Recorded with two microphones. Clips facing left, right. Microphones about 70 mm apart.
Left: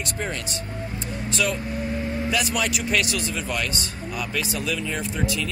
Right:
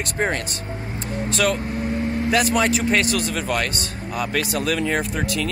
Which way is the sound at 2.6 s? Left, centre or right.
Right.